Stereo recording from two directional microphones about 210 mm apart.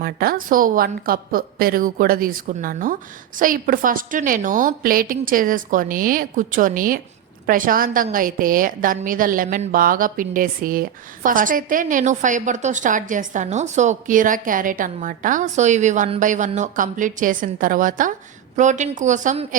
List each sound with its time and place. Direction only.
0.0 s a woman's voice: 45° right (ahead or behind)